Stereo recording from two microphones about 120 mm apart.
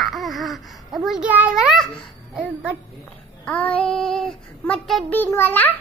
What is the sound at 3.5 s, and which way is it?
A child's voice, 10° left (ahead or behind).